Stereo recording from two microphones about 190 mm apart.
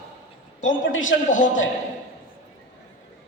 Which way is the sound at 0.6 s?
90° left.